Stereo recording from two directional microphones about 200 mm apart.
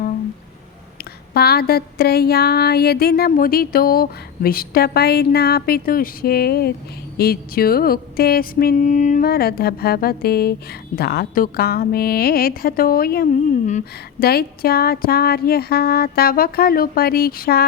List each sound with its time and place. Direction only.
1.3 s speech: 50° left (ahead or behind)